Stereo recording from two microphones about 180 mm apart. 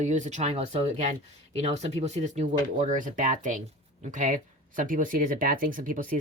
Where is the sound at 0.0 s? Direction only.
40° right (ahead or behind).